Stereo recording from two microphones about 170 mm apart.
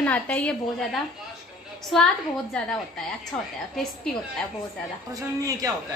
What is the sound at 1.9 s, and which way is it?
Speech, centre (ahead or behind).